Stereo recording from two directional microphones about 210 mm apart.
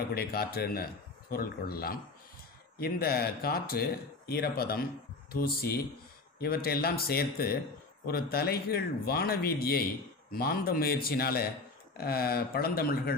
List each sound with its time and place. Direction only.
0.1 s speech: 45° left (ahead or behind)